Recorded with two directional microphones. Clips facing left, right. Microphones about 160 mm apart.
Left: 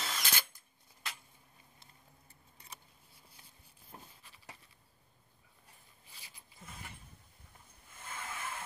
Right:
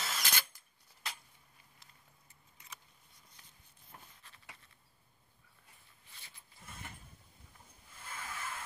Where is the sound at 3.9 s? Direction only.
25° left (ahead or behind).